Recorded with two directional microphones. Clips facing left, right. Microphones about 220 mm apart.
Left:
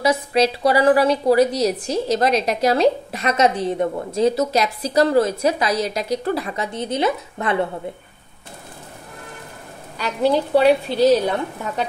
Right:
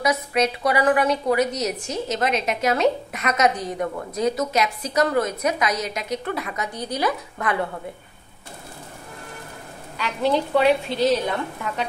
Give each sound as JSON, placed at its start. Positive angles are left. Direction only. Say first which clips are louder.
{"t": 0.0, "sound": "a woman's voice", "louder": "left 4 dB", "side_deg": 30}
{"t": 9.9, "sound": "a woman's voice", "louder": "left 3 dB", "side_deg": 40}